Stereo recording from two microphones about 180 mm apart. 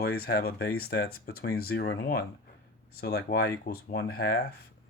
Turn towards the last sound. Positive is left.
turn(degrees=65)  # may be behind; listen again after turning